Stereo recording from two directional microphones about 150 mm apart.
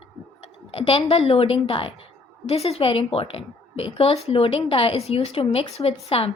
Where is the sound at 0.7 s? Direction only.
40° left (ahead or behind).